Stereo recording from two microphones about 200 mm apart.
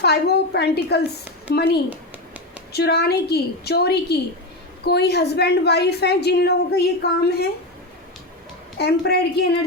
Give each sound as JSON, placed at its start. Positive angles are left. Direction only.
{"t": 0.0, "sound": "a woman's voice", "side_deg": 55}
{"t": 8.8, "sound": "a woman's voice", "side_deg": 55}